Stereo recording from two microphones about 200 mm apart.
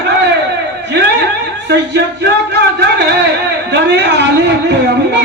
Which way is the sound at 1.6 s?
60° right (ahead or behind).